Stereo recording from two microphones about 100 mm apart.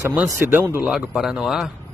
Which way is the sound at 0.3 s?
20° right (ahead or behind).